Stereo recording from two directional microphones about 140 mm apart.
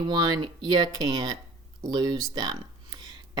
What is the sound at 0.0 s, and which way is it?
Speech, 30° right (ahead or behind).